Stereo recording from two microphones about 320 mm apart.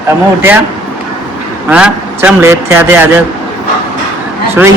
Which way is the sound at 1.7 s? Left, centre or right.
Centre.